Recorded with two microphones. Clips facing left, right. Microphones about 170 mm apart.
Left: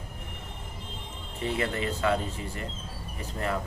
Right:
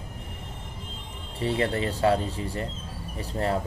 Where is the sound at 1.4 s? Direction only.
35° right (ahead or behind).